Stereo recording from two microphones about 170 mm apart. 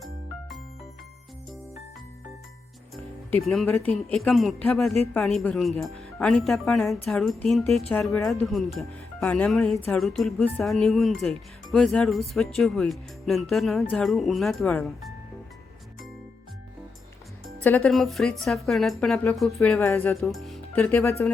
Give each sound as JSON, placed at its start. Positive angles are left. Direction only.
{"t": 0.0, "sound": "music", "side_deg": 0}
{"t": 3.4, "sound": "speech", "side_deg": 0}
{"t": 3.7, "sound": "speech", "side_deg": 10}
{"t": 9.7, "sound": "a sound", "side_deg": 15}
{"t": 10.0, "sound": "speech", "side_deg": 0}
{"t": 17.6, "sound": "speech", "side_deg": 5}
{"t": 19.9, "sound": "a sound", "side_deg": 15}
{"t": 20.3, "sound": "music", "side_deg": 0}
{"t": 21.0, "sound": "a sound", "side_deg": 15}